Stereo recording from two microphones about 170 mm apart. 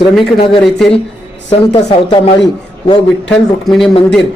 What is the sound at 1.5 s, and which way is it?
Speech, 35° left (ahead or behind).